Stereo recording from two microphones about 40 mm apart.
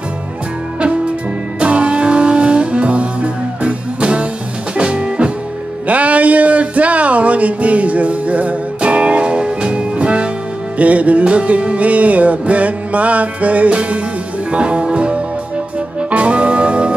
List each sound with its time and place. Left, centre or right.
1.6 s music: right
5.9 s music: right